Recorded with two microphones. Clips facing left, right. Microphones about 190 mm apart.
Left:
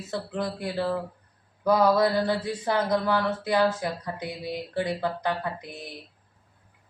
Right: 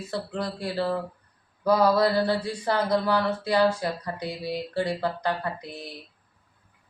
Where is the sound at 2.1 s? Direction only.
20° left (ahead or behind).